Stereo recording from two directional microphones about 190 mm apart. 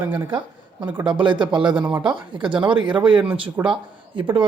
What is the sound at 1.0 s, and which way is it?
Speech, 25° right (ahead or behind).